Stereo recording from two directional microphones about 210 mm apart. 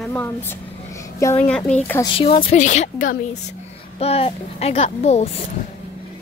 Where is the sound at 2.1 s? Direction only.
25° left (ahead or behind).